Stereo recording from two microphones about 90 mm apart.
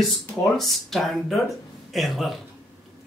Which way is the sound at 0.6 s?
Centre (ahead or behind).